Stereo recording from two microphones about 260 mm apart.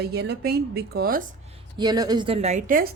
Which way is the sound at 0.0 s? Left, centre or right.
Right.